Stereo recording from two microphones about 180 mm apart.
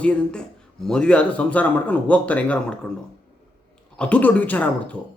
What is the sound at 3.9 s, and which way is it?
A man's voice, 5° left (ahead or behind).